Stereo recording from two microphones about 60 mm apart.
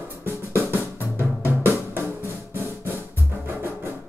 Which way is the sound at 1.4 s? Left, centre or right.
Right.